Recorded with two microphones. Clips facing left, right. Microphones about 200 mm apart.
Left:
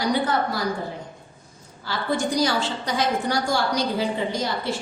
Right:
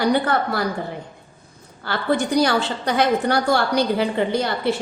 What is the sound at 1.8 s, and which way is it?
A woman's voice, 60° right (ahead or behind).